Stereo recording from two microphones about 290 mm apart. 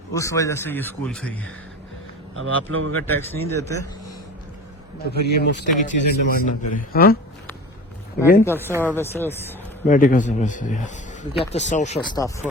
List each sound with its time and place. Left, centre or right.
0.1 s speech: centre
2.3 s speech: right
3.1 s speech: centre
5.1 s a man's voice: left
8.4 s speech: centre
9.8 s speech: left
12.1 s speech: centre